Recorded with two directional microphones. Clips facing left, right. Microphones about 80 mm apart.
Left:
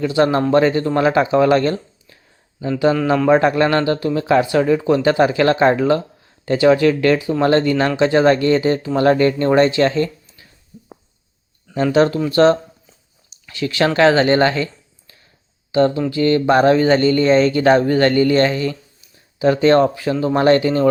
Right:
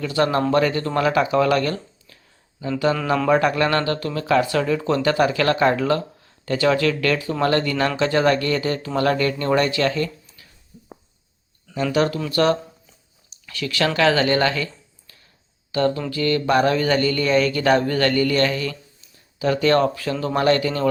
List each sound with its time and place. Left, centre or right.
0.0 s speech: left
10.7 s a sound: centre
11.7 s speech: left